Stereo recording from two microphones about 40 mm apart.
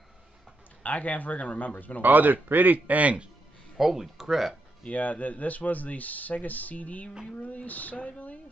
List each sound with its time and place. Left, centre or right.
0.8 s a man's voice: left
2.0 s a man's voice: right
3.7 s speech: centre
4.9 s a man's voice: left